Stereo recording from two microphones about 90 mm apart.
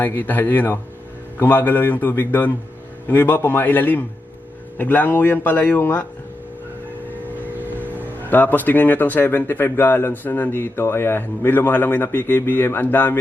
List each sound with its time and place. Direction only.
0.0 s speech: 20° left (ahead or behind)
7.7 s speech: 20° left (ahead or behind)